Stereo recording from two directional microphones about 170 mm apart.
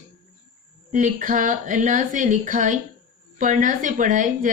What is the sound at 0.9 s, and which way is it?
Speech, 50° right (ahead or behind).